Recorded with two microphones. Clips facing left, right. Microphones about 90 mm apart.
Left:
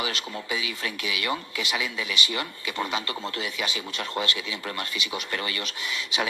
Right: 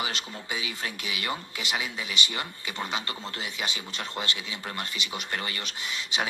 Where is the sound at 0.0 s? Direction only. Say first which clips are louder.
Left 3 dB; 35° right (ahead or behind).